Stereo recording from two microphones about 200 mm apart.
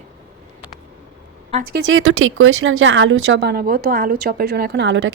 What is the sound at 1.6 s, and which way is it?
Speech, 50° right (ahead or behind).